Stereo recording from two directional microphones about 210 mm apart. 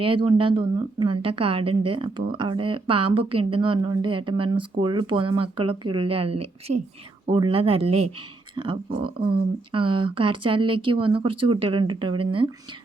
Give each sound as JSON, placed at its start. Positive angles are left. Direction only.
{"t": 0.0, "sound": "speech", "side_deg": -25}